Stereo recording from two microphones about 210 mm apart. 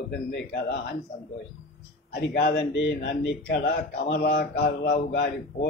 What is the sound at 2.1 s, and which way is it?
A man's voice, 50° left (ahead or behind).